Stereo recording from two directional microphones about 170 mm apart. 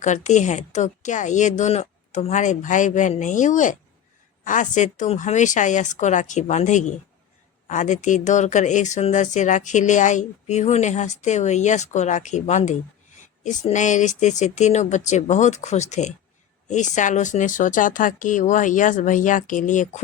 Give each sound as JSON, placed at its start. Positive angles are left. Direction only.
{"t": 0.0, "sound": "a woman's voice", "side_deg": 45}